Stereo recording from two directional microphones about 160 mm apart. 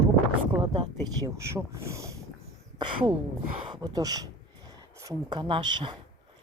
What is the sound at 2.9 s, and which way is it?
Speech, 30° right (ahead or behind).